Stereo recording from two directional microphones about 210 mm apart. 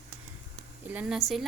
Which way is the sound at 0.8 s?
5° right (ahead or behind).